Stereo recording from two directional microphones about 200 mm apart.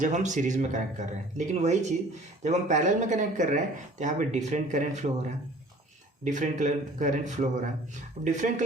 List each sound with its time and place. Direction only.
0.0 s speech: 35° right (ahead or behind)